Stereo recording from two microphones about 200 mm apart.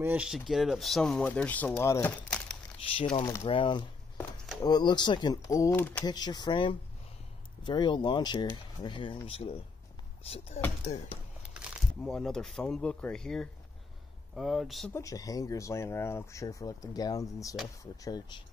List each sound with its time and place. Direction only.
0.0 s speech: 5° right (ahead or behind)
2.9 s speech: 25° left (ahead or behind); by 6.0 s 10° left (ahead or behind)
6.0 s speech: 20° left (ahead or behind)
11.5 s speech: centre (ahead or behind)
14.9 s speech: 15° left (ahead or behind)